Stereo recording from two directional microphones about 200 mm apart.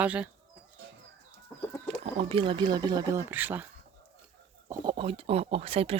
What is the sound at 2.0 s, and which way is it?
Speech, 30° right (ahead or behind).